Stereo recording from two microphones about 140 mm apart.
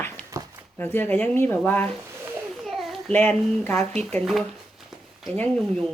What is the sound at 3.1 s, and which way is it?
A woman's voice, 15° left (ahead or behind).